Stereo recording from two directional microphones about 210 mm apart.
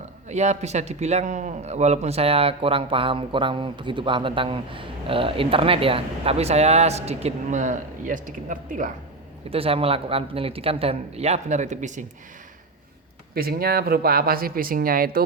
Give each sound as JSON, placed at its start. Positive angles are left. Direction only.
{"t": 0.3, "sound": "a man's voice", "side_deg": -35}
{"t": 9.5, "sound": "a man's voice", "side_deg": -25}
{"t": 13.3, "sound": "speech", "side_deg": -45}